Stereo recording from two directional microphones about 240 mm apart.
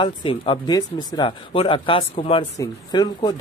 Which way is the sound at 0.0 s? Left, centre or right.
Left.